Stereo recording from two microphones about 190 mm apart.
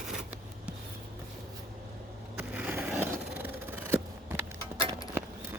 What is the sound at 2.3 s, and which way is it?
Skateboard, 10° right (ahead or behind).